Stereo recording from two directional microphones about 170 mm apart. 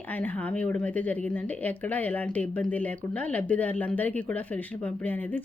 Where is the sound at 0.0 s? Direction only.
10° left (ahead or behind).